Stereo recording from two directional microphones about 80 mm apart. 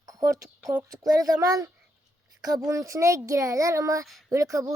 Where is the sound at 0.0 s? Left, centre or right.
Right.